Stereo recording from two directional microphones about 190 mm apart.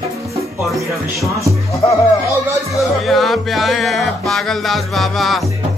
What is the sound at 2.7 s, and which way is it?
Music, centre (ahead or behind).